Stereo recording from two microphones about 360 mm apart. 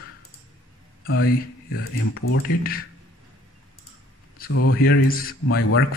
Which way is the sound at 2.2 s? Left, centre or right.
Left.